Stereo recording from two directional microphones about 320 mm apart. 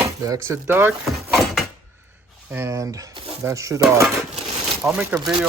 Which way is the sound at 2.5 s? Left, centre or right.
Centre.